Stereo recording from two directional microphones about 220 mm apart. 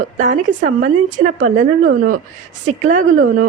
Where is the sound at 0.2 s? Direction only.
35° right (ahead or behind).